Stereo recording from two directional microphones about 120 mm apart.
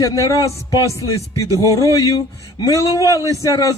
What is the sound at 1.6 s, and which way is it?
Music, 30° left (ahead or behind).